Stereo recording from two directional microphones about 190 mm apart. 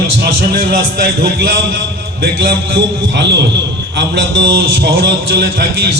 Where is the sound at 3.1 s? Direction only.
65° right (ahead or behind).